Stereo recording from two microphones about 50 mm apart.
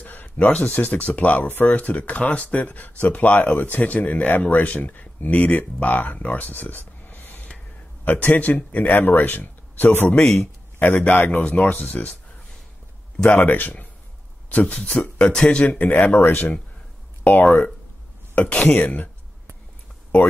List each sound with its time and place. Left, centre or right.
0.0 s a sound: left
0.7 s speech: left
10.2 s speech: left
10.8 s speech: left
13.3 s speech: left
14.7 s speech: left